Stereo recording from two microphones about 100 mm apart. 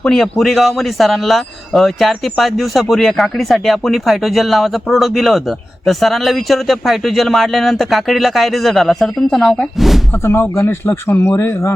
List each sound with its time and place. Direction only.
0.0 s speech: 5° left (ahead or behind)
10.1 s speech: 25° left (ahead or behind)